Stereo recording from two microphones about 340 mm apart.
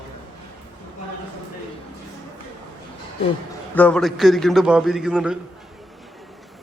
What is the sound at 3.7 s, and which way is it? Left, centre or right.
A man's voice, centre.